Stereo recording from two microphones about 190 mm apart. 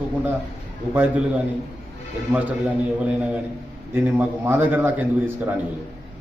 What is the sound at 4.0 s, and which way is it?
A man's voice, 10° right (ahead or behind).